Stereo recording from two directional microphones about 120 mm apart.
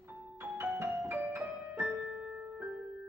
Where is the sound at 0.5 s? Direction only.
20° right (ahead or behind).